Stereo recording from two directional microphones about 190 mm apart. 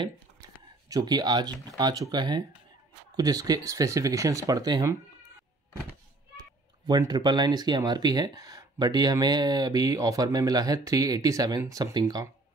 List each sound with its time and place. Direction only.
0.0 s a sound: 20° right (ahead or behind)
1.8 s speech: 20° right (ahead or behind)
6.9 s speech: 20° right (ahead or behind)